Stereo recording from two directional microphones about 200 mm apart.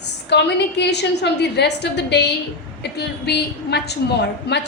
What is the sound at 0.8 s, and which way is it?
A woman's voice, 60° left (ahead or behind).